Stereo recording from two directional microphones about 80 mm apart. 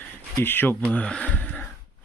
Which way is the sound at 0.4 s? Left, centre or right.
Left.